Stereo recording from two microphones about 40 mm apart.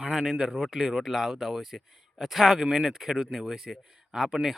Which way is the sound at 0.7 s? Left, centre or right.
Centre.